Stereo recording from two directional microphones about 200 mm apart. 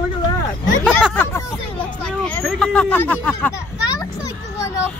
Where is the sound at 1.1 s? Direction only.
10° left (ahead or behind).